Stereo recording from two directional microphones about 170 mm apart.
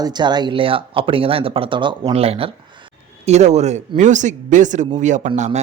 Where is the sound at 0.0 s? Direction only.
25° right (ahead or behind).